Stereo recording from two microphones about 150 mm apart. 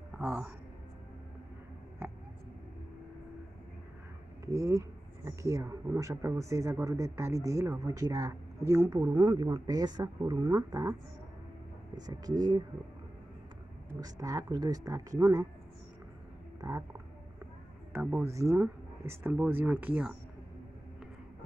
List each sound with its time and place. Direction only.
0.2 s speech: 10° right (ahead or behind)
4.5 s speech: 20° right (ahead or behind)
12.1 s speech: 25° right (ahead or behind)
13.8 s speech: 25° right (ahead or behind)
16.6 s speech: 20° right (ahead or behind)
18.1 s speech: 20° right (ahead or behind)